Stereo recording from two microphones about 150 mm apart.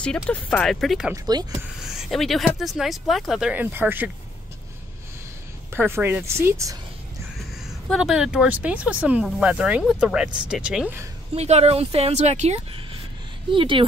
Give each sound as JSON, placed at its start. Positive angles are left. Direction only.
{"t": 0.0, "sound": "speech", "side_deg": 5}
{"t": 1.1, "sound": "speech", "side_deg": -25}
{"t": 1.8, "sound": "speech", "side_deg": 0}
{"t": 5.7, "sound": "speech", "side_deg": -15}
{"t": 7.9, "sound": "speech", "side_deg": -5}
{"t": 11.3, "sound": "speech", "side_deg": -45}
{"t": 13.5, "sound": "speech", "side_deg": -35}